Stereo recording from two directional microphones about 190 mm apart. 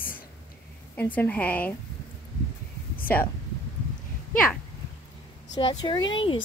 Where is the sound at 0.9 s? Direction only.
10° left (ahead or behind).